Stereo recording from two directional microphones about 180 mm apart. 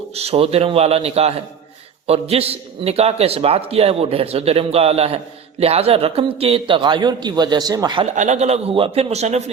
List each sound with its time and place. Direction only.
0.1 s a man's voice: 35° right (ahead or behind)
8.1 s a man's voice: 40° right (ahead or behind)